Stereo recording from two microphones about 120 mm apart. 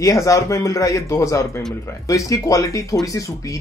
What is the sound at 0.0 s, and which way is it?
Speech, 30° left (ahead or behind).